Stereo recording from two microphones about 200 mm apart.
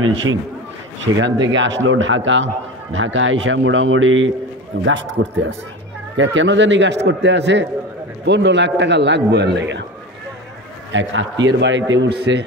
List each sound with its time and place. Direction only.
1.2 s a man's voice: 70° right (ahead or behind)
10.9 s a man's voice: 70° right (ahead or behind)